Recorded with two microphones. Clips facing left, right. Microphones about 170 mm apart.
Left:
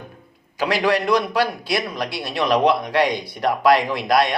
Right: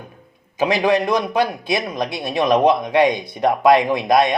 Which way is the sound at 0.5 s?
20° right (ahead or behind).